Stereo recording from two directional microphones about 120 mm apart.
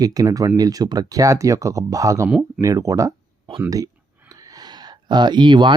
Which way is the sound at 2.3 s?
5° right (ahead or behind).